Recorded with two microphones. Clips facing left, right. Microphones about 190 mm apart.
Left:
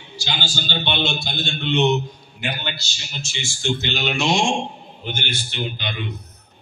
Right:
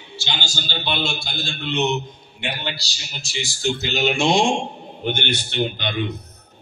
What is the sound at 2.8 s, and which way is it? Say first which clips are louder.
Speech: left 3 dB; 35° right (ahead or behind).